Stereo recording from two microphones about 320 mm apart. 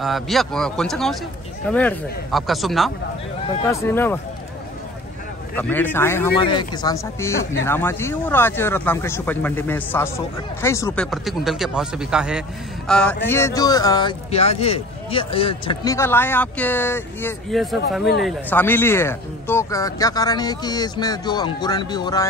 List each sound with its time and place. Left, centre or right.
0.0 s a man's voice: centre
5.6 s a man's voice: centre